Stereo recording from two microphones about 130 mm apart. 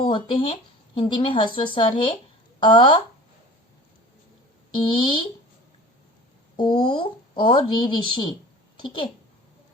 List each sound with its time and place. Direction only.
0.0 s a woman's voice: 40° left (ahead or behind)
4.9 s a woman's voice: 40° left (ahead or behind)
6.6 s a woman's voice: 40° left (ahead or behind)